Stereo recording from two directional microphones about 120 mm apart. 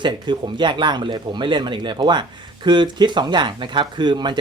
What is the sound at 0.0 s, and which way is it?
Speech, 40° right (ahead or behind).